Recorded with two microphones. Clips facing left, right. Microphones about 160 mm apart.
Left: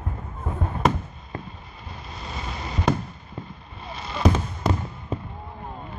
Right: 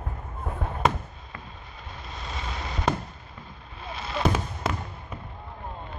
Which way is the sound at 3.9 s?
Centre (ahead or behind).